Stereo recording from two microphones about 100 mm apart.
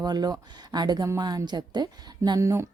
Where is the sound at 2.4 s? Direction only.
30° right (ahead or behind).